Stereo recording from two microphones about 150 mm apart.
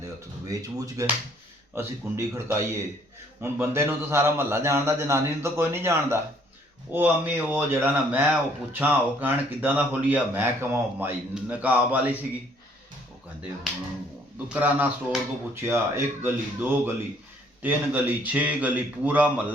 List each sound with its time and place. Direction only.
0.4 s speech: 25° right (ahead or behind)
14.5 s speech: 10° right (ahead or behind)